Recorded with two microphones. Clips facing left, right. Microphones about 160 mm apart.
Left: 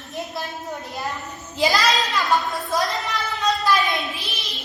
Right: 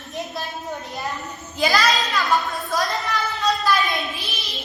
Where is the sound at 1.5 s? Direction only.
20° left (ahead or behind).